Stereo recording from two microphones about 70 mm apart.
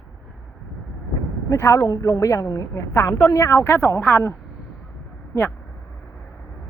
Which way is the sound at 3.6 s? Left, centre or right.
Left.